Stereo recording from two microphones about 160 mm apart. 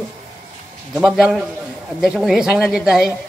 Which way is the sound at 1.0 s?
Centre (ahead or behind).